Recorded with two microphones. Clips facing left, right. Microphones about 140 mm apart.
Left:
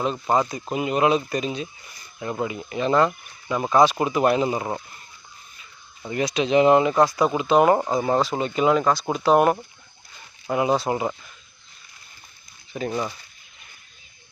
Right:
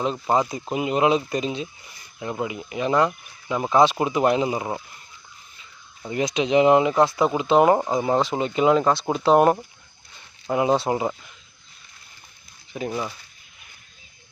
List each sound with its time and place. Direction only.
0.3 s speech: 15° right (ahead or behind)
6.1 s speech: 20° right (ahead or behind)
7.8 s speech: centre (ahead or behind)
8.1 s speech: 20° right (ahead or behind)
10.8 s speech: 20° right (ahead or behind)
12.8 s speech: 5° right (ahead or behind)